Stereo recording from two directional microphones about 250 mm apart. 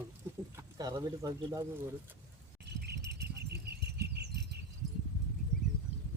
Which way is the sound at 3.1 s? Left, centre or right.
Right.